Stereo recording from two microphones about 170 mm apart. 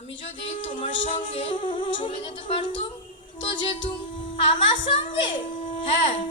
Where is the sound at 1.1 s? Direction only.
30° left (ahead or behind).